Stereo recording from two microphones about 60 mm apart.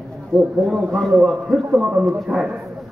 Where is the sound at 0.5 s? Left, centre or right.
Centre.